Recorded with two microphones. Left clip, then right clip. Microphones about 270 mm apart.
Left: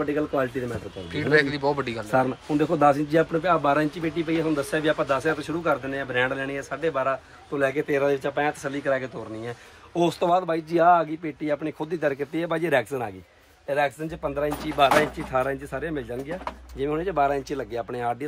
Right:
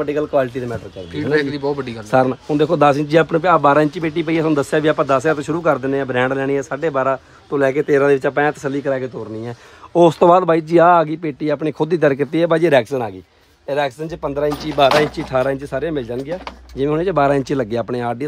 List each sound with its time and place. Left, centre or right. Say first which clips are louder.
0.1 s speech: right 7 dB; centre
2.0 s speech: right 9 dB; right
9.9 s speech: right 11 dB; right